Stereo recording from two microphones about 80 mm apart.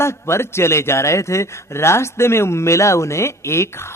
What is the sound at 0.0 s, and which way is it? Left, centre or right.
Speech, left.